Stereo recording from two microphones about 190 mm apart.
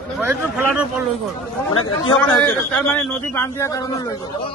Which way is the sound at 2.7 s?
10° left (ahead or behind).